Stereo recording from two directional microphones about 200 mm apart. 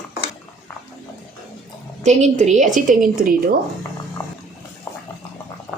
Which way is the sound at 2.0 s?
35° right (ahead or behind).